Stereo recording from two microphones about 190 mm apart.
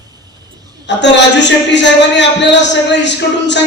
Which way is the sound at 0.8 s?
70° left (ahead or behind).